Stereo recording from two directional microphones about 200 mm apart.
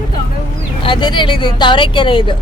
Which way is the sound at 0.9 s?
25° left (ahead or behind).